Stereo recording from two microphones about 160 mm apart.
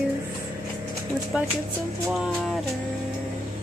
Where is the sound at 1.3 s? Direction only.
5° right (ahead or behind).